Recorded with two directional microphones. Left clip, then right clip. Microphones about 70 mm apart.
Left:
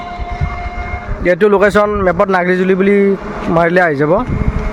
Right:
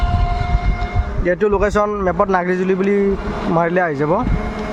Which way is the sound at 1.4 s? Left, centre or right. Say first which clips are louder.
Left 6 dB; left.